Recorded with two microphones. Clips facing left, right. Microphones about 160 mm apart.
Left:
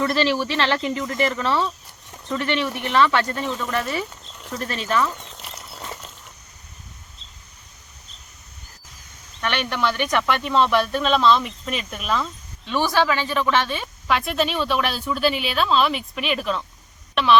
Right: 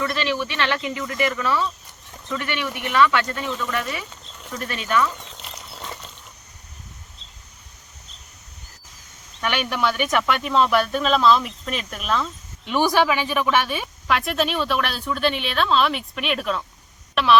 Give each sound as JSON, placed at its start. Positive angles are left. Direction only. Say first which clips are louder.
{"t": 0.0, "sound": "speech", "louder": "left 3 dB", "side_deg": 30}
{"t": 4.3, "sound": "sheep", "louder": "left 1 dB", "side_deg": 0}
{"t": 4.5, "sound": "speech", "louder": "even", "side_deg": 30}
{"t": 5.1, "sound": "a sound", "louder": "even", "side_deg": 0}
{"t": 9.4, "sound": "a woman's voice", "louder": "even", "side_deg": -5}
{"t": 12.6, "sound": "a woman's voice", "louder": "right 1 dB", "side_deg": -15}